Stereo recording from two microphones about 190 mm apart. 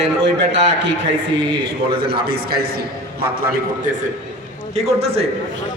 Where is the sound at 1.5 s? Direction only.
55° right (ahead or behind).